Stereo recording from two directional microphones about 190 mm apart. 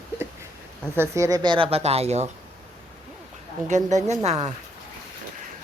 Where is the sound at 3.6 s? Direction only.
40° right (ahead or behind).